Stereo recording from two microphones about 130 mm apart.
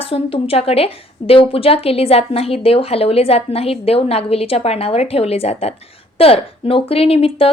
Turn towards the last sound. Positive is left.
turn(degrees=50)  # may be behind; listen again after turning